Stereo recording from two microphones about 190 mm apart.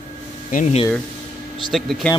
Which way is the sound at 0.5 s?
35° left (ahead or behind).